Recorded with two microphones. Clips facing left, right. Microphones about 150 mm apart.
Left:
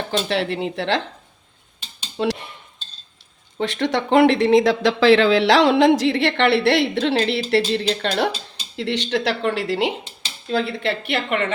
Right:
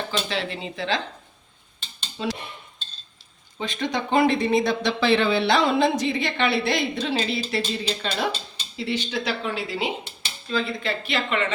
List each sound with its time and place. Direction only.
0.3 s speech: 60° left (ahead or behind)
2.1 s speech: 80° left
3.6 s speech: 75° left (ahead or behind); by 11.5 s 55° left (ahead or behind)